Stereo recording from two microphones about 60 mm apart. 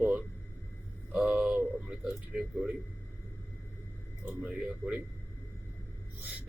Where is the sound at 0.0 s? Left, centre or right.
Right.